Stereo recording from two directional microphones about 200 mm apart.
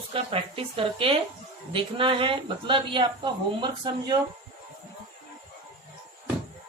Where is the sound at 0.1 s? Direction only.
25° right (ahead or behind).